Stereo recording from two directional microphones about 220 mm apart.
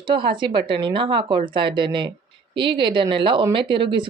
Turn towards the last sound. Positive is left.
turn(degrees=-20)  # may be behind; listen again after turning